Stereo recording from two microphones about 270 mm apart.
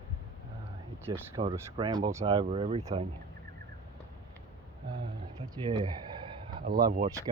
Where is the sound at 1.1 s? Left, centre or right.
Centre.